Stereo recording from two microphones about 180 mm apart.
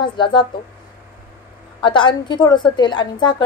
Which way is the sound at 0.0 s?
25° left (ahead or behind).